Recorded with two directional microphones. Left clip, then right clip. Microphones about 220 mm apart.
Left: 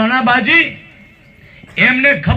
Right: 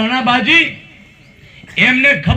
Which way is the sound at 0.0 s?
50° right (ahead or behind).